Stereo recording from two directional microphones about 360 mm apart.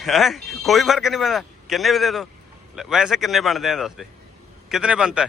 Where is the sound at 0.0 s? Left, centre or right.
Centre.